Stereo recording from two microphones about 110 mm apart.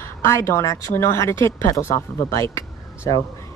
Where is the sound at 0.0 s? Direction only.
25° left (ahead or behind).